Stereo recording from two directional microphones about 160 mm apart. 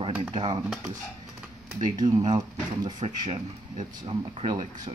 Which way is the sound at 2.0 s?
25° right (ahead or behind).